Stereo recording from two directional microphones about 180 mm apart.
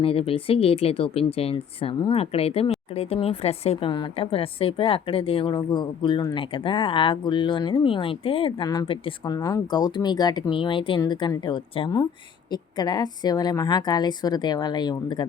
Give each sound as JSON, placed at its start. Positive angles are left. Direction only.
{"t": 0.0, "sound": "speech", "side_deg": 30}